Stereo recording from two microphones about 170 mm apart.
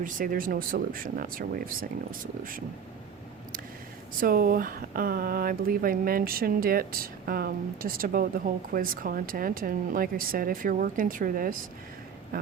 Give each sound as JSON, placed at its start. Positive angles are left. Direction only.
{"t": 0.0, "sound": "speech", "side_deg": -55}
{"t": 4.2, "sound": "speech", "side_deg": -60}